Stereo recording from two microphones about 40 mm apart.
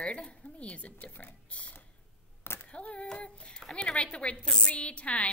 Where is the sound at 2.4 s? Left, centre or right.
Left.